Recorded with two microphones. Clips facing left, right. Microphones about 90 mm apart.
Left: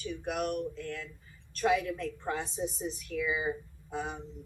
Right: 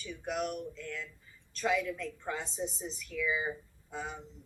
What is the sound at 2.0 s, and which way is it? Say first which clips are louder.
Speech: left 3 dB; 60° left (ahead or behind).